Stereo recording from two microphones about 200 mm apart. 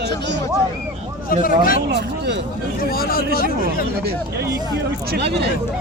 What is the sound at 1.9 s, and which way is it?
Speech, 55° right (ahead or behind).